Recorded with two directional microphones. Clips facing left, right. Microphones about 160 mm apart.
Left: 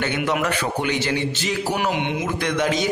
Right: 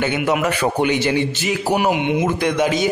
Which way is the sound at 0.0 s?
10° right (ahead or behind).